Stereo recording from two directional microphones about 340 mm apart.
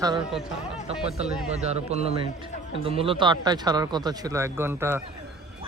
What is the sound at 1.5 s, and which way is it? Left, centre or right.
Speech, centre.